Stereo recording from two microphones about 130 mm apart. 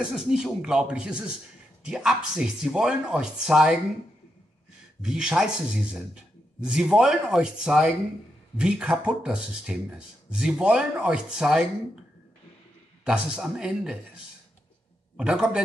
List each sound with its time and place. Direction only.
0.0 s speech: 5° right (ahead or behind)
5.0 s speech: 5° right (ahead or behind)
13.0 s speech: 5° right (ahead or behind)
15.1 s speech: 5° right (ahead or behind)